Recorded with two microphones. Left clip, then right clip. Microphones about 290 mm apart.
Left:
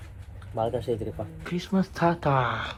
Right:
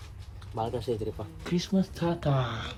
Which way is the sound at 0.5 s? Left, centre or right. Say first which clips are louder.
Left 4 dB; centre.